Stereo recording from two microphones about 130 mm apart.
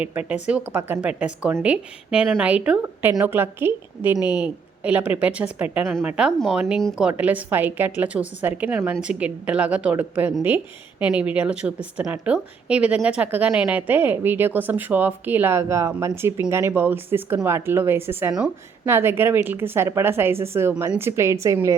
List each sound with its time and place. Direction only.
0.0 s a woman's voice: 10° right (ahead or behind)
4.1 s a woman's voice: 35° left (ahead or behind)
4.4 s a woman's voice: 10° right (ahead or behind)